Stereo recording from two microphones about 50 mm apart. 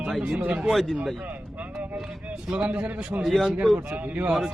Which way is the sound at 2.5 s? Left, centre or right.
Right.